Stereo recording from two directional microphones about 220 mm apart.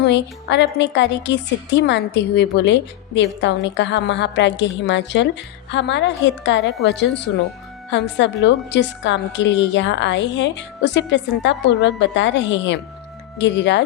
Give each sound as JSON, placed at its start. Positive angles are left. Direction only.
{"t": 0.0, "sound": "a woman's voice", "side_deg": 50}